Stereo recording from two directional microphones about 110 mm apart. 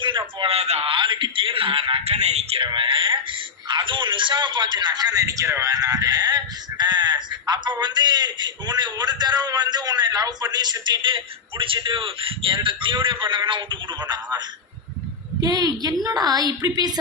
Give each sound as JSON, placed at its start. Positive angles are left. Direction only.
{"t": 0.4, "sound": "speech", "side_deg": -70}
{"t": 2.6, "sound": "a man's voice", "side_deg": -50}
{"t": 15.4, "sound": "a man's voice", "side_deg": -35}